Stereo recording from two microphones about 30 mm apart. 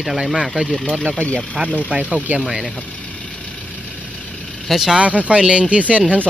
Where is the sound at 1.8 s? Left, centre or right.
Right.